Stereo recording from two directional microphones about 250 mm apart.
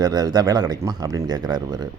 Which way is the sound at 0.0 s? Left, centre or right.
Centre.